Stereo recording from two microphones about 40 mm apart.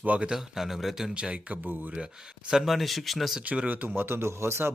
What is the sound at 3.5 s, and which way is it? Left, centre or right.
Speech, right.